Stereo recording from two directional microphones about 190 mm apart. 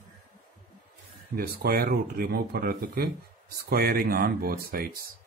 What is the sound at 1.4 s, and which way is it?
Speech, 50° right (ahead or behind).